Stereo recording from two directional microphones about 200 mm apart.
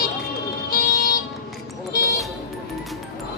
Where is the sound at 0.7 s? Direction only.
50° left (ahead or behind).